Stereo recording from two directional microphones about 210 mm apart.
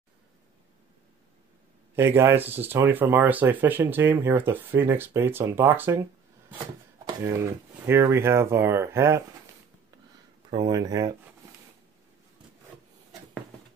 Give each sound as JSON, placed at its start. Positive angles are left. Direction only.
{"t": 2.0, "sound": "speech", "side_deg": -10}
{"t": 7.1, "sound": "speech", "side_deg": -15}
{"t": 10.5, "sound": "speech", "side_deg": -20}